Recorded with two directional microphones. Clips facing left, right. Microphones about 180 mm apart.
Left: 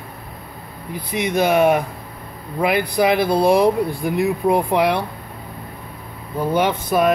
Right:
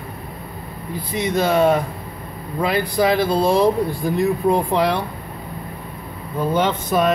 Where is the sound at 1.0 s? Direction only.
15° left (ahead or behind).